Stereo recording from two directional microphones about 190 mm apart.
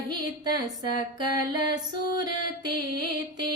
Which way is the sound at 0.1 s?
20° right (ahead or behind).